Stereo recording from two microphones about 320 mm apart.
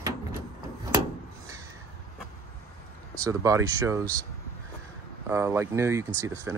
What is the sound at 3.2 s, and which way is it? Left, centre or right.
Speech, centre.